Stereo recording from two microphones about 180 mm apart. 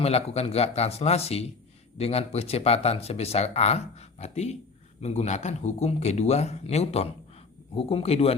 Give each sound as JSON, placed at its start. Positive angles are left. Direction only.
{"t": 0.0, "sound": "speech", "side_deg": 35}